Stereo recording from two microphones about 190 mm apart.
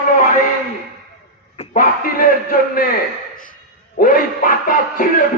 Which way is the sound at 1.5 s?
45° left (ahead or behind).